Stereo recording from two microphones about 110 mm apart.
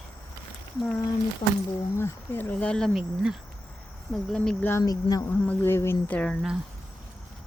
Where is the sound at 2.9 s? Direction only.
5° right (ahead or behind).